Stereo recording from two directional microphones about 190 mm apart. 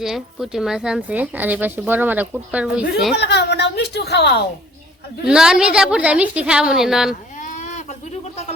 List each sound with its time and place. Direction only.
0.0 s speech: centre (ahead or behind)
3.2 s speech: 65° left (ahead or behind)
5.2 s a woman's voice: 5° right (ahead or behind)
7.3 s sheep: 40° left (ahead or behind)